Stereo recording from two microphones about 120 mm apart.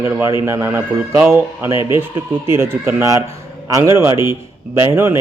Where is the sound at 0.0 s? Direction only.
20° right (ahead or behind).